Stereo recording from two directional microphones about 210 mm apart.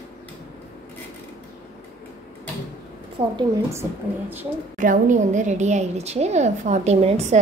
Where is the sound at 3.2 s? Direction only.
25° right (ahead or behind).